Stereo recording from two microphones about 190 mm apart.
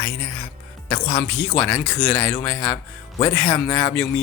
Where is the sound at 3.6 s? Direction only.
15° left (ahead or behind).